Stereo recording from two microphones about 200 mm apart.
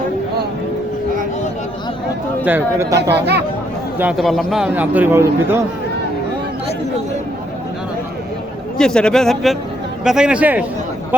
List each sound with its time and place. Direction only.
2.4 s a man's voice: 10° right (ahead or behind)
3.2 s speech: 55° right (ahead or behind)
3.9 s a man's voice: 5° right (ahead or behind)
8.8 s a man's voice: 5° left (ahead or behind)